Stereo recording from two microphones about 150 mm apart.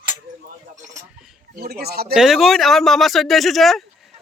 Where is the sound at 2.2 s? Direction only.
Centre (ahead or behind).